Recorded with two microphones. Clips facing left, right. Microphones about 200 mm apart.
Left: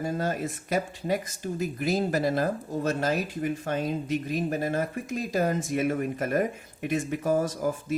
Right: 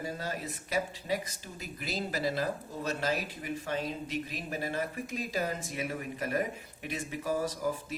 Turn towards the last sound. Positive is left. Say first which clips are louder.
# left 4 dB
turn(degrees=45)  # may be behind; listen again after turning